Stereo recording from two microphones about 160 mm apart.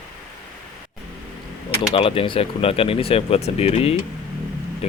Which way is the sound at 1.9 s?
35° left (ahead or behind).